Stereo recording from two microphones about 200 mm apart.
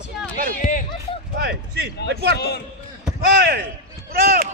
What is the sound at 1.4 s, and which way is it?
Speech, 55° right (ahead or behind).